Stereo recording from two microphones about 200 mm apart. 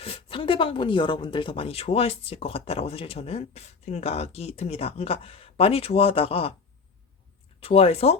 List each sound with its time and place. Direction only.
0.0 s speech: 25° left (ahead or behind)
7.6 s speech: 30° left (ahead or behind)